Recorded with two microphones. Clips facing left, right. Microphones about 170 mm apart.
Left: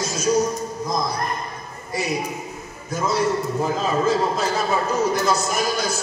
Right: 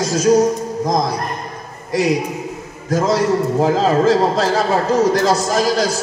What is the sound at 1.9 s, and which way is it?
A man's voice, 90° right.